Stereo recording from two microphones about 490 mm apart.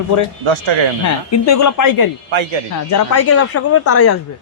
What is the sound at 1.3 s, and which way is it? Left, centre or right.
Speech, left.